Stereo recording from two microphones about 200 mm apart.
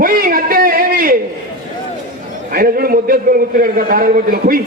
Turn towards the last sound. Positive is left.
turn(degrees=-45)  # may be behind; listen again after turning